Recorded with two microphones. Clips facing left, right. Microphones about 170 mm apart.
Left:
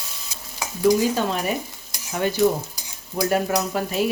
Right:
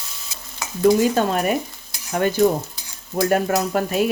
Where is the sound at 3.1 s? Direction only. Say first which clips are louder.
Right 3 dB; 50° right (ahead or behind).